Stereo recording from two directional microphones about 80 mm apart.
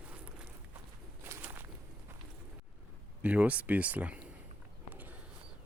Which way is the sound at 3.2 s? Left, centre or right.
Centre.